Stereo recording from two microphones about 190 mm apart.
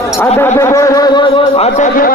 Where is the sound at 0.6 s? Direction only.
15° left (ahead or behind); by 1.9 s 30° left (ahead or behind).